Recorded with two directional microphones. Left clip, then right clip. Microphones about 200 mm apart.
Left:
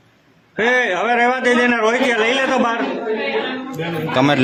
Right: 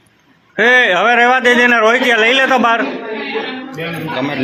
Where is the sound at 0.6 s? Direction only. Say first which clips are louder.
Right 6 dB; 20° right (ahead or behind).